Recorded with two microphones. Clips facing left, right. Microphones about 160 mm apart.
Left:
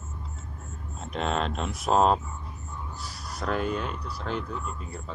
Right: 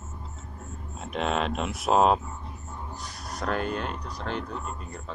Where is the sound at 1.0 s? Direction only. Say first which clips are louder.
Right 1 dB; centre (ahead or behind).